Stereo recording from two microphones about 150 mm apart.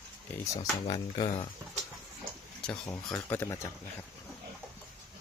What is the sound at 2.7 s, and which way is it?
Speech, 10° left (ahead or behind).